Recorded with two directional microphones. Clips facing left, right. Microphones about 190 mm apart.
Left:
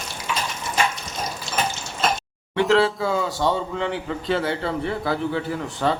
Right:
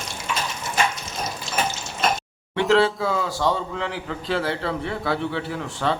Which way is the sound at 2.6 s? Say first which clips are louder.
Even; centre (ahead or behind).